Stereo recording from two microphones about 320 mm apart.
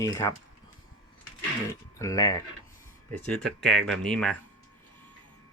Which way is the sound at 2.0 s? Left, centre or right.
Centre.